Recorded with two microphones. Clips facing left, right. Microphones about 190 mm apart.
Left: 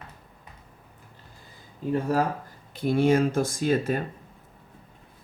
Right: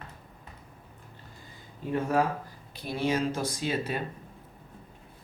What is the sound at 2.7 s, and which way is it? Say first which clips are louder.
Speech: left 8 dB; 50° left (ahead or behind).